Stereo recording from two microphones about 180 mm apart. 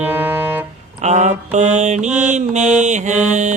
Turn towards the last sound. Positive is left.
turn(degrees=-40)  # may be behind; listen again after turning